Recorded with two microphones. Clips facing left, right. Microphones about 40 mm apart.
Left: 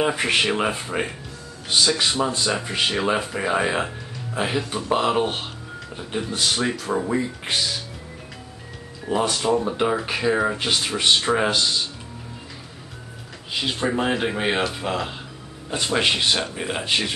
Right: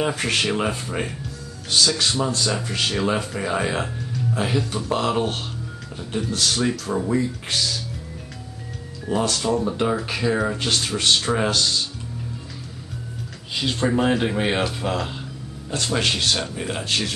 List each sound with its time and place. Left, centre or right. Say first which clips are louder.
0.0 s speech: left 2 dB; centre
9.0 s speech: left 1 dB; centre
13.6 s speech: right 2 dB; centre